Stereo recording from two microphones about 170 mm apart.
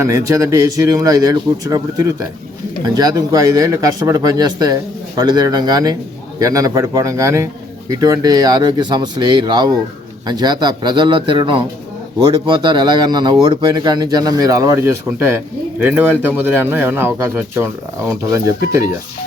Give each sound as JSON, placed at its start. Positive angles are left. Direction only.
{"t": 0.0, "sound": "speech", "side_deg": -15}